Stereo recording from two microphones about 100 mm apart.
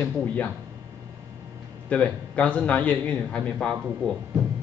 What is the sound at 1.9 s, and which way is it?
A man's voice, 10° left (ahead or behind).